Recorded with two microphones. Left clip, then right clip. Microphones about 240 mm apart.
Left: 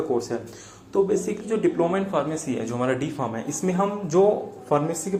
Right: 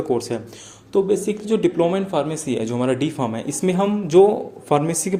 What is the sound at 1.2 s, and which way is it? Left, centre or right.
Speech, right.